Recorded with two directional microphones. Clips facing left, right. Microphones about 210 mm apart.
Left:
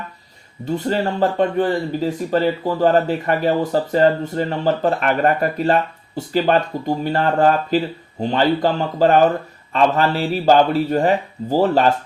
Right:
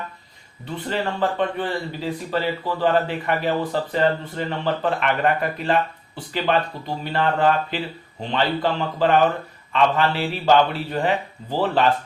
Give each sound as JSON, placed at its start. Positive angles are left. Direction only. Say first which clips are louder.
{"t": 0.6, "sound": "speech", "louder": "left 6 dB", "side_deg": 45}